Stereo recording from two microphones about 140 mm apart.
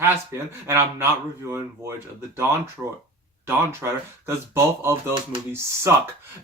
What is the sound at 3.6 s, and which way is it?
Speech, 20° right (ahead or behind).